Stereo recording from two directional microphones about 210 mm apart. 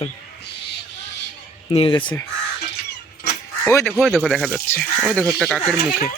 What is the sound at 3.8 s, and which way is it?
Speech, centre (ahead or behind).